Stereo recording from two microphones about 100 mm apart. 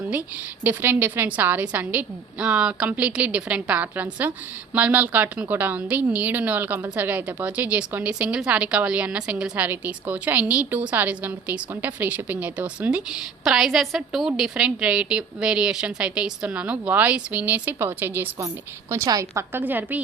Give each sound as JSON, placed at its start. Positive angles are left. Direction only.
{"t": 0.1, "sound": "a woman's voice", "side_deg": -15}
{"t": 18.9, "sound": "a woman's voice", "side_deg": -35}
{"t": 19.5, "sound": "a woman's voice", "side_deg": -20}